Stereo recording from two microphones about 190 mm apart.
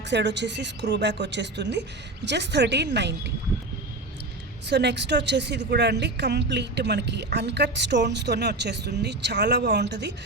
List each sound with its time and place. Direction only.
0.1 s speech: 65° right (ahead or behind)
4.7 s speech: 65° right (ahead or behind)